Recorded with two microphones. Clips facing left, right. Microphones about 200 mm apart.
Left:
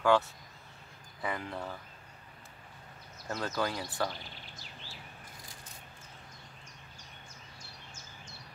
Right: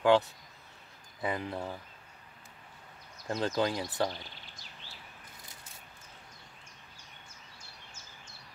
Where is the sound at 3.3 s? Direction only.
20° right (ahead or behind).